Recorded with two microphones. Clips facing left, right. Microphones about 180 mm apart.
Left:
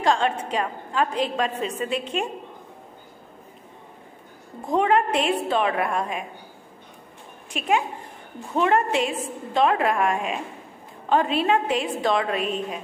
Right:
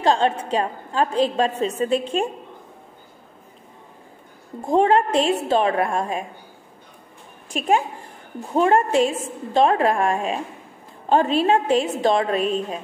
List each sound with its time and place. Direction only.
0.0 s a woman's voice: 30° right (ahead or behind)
4.6 s a woman's voice: 30° right (ahead or behind)
7.5 s a woman's voice: 40° right (ahead or behind)